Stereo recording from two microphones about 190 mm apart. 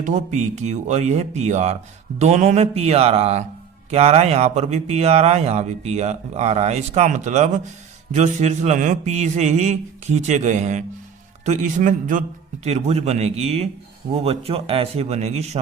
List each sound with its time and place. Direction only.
0.0 s speech: 40° right (ahead or behind)